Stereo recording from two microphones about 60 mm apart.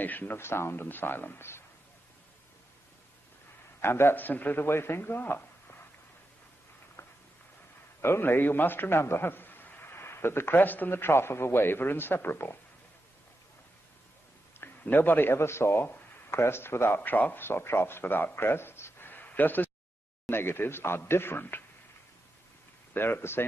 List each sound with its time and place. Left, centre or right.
0.0 s a man's voice: left
3.8 s a man's voice: left
4.6 s speech: left
7.0 s a sound: left
8.0 s a man's voice: left
14.6 s speech: left
17.1 s a man's voice: left
22.9 s a man's voice: left